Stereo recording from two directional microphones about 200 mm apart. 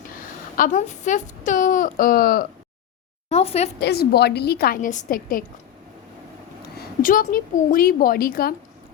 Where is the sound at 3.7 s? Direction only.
50° left (ahead or behind).